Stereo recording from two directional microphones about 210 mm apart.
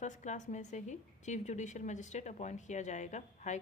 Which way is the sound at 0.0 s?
35° left (ahead or behind).